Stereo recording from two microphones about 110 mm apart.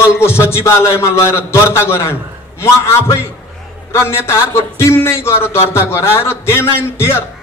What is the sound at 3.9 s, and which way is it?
A man's voice, 25° left (ahead or behind).